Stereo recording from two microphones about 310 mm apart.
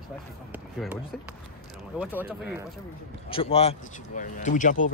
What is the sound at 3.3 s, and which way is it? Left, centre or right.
Speech, centre.